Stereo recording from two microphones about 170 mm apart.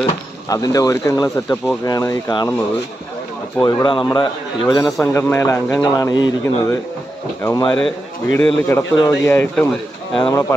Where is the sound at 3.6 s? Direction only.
20° left (ahead or behind).